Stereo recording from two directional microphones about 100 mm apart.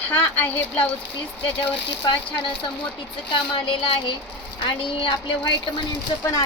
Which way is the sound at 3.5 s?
55° left (ahead or behind).